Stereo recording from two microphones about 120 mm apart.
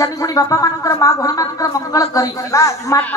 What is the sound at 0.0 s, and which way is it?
Speech, 30° left (ahead or behind).